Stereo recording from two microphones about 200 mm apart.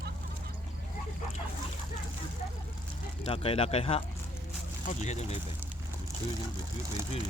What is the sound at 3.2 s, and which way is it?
Speech, 30° left (ahead or behind).